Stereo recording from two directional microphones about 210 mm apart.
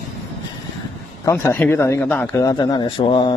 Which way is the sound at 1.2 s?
10° left (ahead or behind).